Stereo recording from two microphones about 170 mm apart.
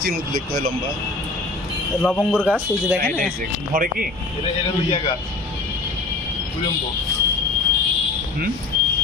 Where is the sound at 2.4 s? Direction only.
10° right (ahead or behind).